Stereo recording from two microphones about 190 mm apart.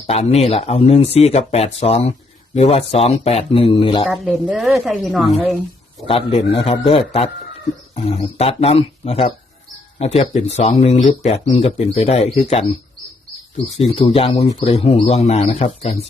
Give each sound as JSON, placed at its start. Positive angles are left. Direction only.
{"t": 0.1, "sound": "speech", "side_deg": 35}
{"t": 4.0, "sound": "a woman's voice", "side_deg": 0}
{"t": 6.1, "sound": "a man's voice", "side_deg": 30}
{"t": 13.7, "sound": "speech", "side_deg": 30}